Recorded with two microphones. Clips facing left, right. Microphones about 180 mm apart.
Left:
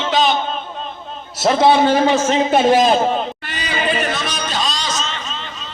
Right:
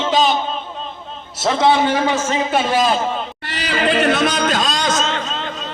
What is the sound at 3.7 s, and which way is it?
Singing, 75° right (ahead or behind).